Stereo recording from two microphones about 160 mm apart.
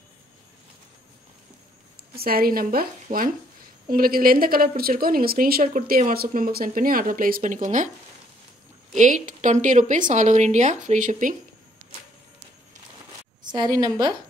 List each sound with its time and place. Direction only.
2.1 s a woman's voice: 70° right (ahead or behind); by 7.9 s 50° right (ahead or behind)
8.9 s a woman's voice: 50° right (ahead or behind)
13.4 s a woman's voice: 25° right (ahead or behind)